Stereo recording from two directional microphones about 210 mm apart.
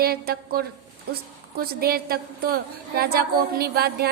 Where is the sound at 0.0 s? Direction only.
45° right (ahead or behind).